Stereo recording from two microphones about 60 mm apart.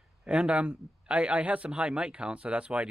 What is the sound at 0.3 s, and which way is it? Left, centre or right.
A man's voice, centre.